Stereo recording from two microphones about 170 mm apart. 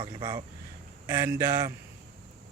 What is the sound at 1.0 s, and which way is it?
Speech, 15° right (ahead or behind).